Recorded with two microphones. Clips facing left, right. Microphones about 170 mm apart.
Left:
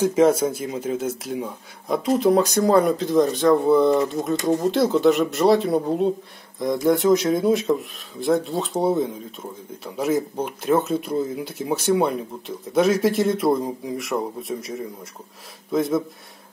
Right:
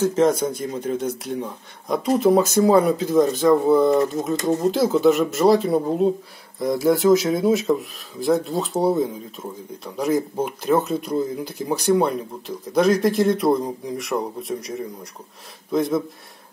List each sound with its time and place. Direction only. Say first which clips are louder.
0.0 s speech: left 1 dB; 10° left (ahead or behind)